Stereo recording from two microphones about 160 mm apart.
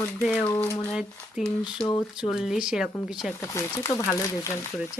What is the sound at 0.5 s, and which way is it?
Speech, 15° left (ahead or behind).